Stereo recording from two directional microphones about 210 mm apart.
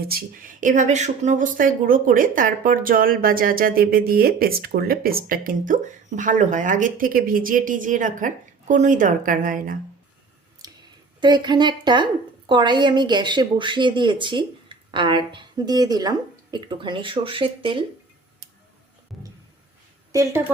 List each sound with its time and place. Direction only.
0.0 s speech: 45° right (ahead or behind)
10.6 s clicking: 20° right (ahead or behind)
11.2 s speech: 20° right (ahead or behind)